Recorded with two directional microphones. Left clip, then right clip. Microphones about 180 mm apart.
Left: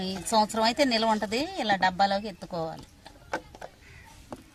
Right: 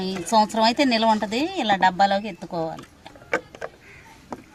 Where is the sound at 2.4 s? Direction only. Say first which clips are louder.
Right 5 dB; 10° right (ahead or behind).